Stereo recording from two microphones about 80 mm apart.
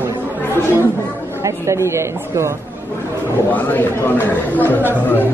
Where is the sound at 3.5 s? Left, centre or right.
Left.